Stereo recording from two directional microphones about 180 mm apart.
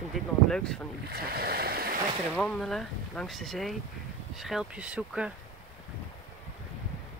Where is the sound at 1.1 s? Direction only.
60° right (ahead or behind).